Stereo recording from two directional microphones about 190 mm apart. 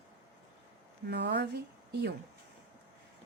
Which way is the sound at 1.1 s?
65° right (ahead or behind).